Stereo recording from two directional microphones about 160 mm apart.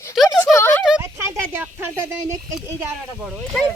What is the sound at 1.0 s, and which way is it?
Speech, 15° right (ahead or behind).